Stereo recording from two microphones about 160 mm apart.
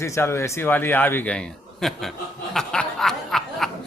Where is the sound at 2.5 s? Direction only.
5° left (ahead or behind).